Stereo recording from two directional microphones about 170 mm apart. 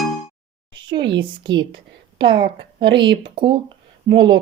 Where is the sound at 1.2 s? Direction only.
30° right (ahead or behind).